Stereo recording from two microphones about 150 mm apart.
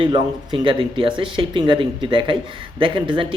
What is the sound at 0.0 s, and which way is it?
Speech, 35° right (ahead or behind).